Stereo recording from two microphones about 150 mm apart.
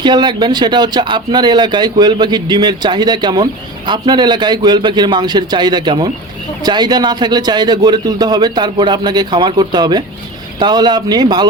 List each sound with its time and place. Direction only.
0.0 s speech: 30° right (ahead or behind)